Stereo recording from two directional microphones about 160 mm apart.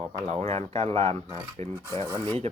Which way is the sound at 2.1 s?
25° right (ahead or behind).